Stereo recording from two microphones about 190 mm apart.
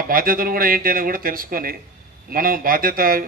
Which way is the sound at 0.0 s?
50° right (ahead or behind).